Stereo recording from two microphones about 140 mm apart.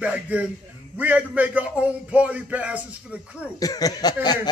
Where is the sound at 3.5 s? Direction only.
25° left (ahead or behind).